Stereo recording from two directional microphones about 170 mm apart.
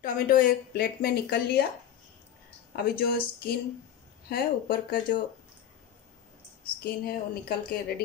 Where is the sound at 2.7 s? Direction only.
65° left (ahead or behind).